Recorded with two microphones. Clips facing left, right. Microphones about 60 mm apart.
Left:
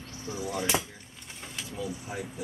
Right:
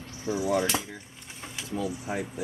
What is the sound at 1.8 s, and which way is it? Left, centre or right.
Speech, right.